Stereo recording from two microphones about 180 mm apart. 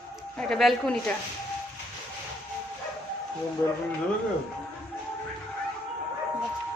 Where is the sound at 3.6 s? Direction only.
15° left (ahead or behind).